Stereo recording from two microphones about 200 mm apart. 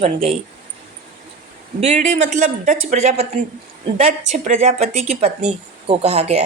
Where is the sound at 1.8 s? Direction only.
35° right (ahead or behind).